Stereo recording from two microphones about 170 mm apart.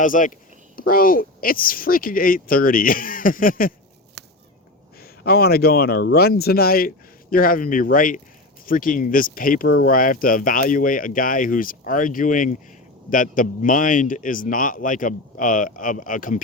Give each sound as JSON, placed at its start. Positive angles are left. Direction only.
{"t": 0.0, "sound": "a man's voice", "side_deg": 50}
{"t": 4.2, "sound": "whip", "side_deg": -80}
{"t": 4.9, "sound": "a man's voice", "side_deg": 65}